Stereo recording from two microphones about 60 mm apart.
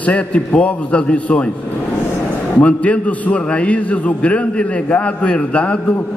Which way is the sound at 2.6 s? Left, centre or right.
Left.